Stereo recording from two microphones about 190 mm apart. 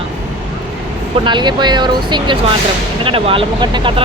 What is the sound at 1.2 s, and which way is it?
Speech, 25° right (ahead or behind).